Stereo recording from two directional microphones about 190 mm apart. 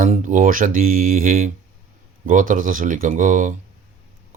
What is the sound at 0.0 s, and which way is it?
Speech, 45° right (ahead or behind).